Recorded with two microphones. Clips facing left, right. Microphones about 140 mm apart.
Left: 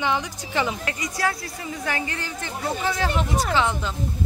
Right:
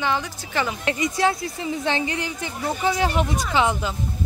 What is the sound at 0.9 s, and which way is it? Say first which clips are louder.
A woman's voice: right 5 dB; 25° right (ahead or behind).